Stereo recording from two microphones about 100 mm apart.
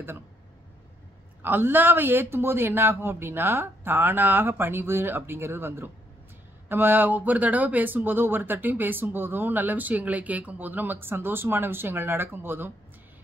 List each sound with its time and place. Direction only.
1.4 s speech: 20° right (ahead or behind)